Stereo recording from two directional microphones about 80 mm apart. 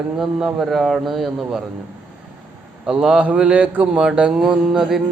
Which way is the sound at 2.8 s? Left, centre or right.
Centre.